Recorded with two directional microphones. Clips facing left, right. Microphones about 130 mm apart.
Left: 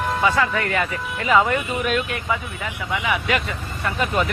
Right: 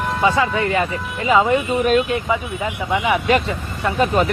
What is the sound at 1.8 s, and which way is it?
Speech, 40° right (ahead or behind).